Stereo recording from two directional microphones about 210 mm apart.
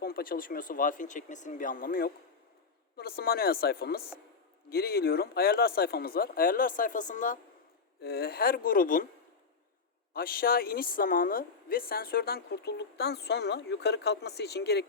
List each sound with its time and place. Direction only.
0.0 s a woman's voice: 45° left (ahead or behind)
8.0 s a woman's voice: 50° left (ahead or behind)
10.1 s a woman's voice: 45° left (ahead or behind)